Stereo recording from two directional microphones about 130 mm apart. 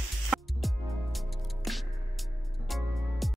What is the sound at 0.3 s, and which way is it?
Music, centre (ahead or behind).